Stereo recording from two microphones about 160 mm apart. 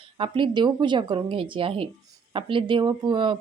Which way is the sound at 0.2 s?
30° right (ahead or behind).